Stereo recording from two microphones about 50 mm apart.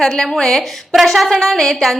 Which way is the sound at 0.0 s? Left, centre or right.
Centre.